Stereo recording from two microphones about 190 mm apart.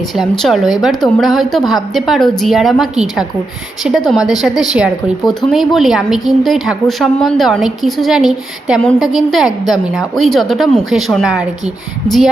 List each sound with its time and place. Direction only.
0.2 s a woman's voice: centre (ahead or behind)